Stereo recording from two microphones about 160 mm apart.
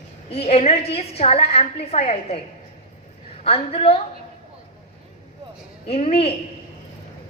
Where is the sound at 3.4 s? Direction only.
35° left (ahead or behind).